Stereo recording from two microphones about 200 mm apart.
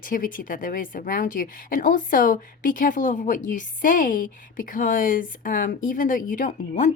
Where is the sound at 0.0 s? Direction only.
45° left (ahead or behind).